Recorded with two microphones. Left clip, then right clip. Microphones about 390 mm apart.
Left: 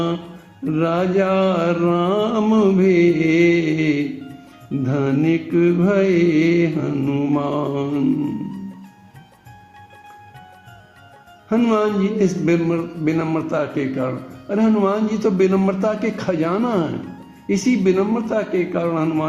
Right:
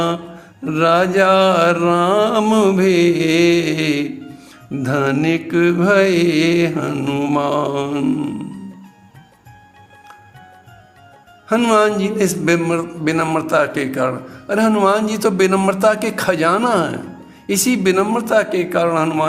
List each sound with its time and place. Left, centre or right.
0.6 s a man's voice: right
11.4 s a man's voice: right